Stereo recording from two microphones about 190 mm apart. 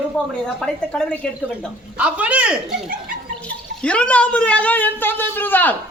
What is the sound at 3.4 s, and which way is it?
Speech, 5° left (ahead or behind).